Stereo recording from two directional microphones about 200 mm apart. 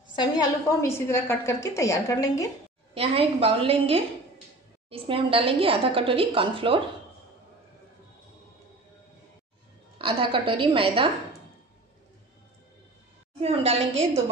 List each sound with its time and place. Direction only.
0.1 s a woman's voice: 20° left (ahead or behind)
2.9 s a woman's voice: 30° right (ahead or behind)
9.9 s a woman's voice: 25° right (ahead or behind)
13.4 s a woman's voice: 30° right (ahead or behind)